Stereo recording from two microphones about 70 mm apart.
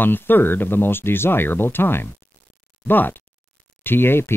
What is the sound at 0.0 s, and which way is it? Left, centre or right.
Speech, left.